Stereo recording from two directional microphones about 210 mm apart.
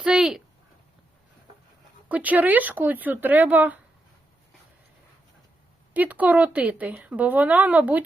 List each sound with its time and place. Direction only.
0.0 s a sound: centre (ahead or behind)
2.0 s speech: 5° right (ahead or behind)
5.9 s speech: 5° right (ahead or behind)